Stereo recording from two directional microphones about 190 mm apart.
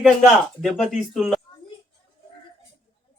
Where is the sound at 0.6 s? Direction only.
Centre (ahead or behind).